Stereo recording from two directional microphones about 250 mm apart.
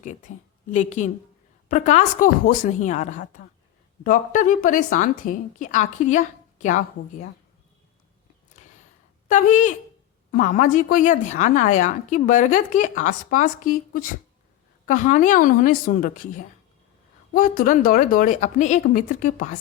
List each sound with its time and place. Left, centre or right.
0.0 s a woman's voice: left
9.3 s a woman's voice: left
14.8 s a woman's voice: left